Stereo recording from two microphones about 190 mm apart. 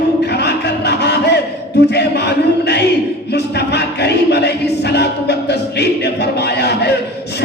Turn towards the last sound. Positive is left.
turn(degrees=60)  # may be behind; listen again after turning